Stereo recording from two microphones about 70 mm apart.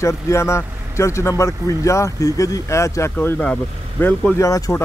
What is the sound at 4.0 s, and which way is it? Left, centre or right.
Speech, left.